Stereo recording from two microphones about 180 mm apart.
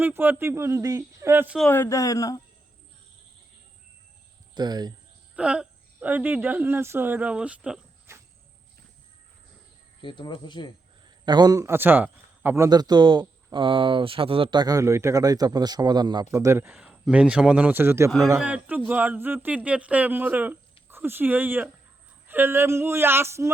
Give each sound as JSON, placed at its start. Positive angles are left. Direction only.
{"t": 0.0, "sound": "speech", "side_deg": -10}
{"t": 1.5, "sound": "speech", "side_deg": 10}
{"t": 4.5, "sound": "a man's voice", "side_deg": -25}
{"t": 5.4, "sound": "speech", "side_deg": -5}
{"t": 8.1, "sound": "cricket", "side_deg": -15}
{"t": 10.0, "sound": "speech", "side_deg": 25}
{"t": 11.3, "sound": "a man's voice", "side_deg": -20}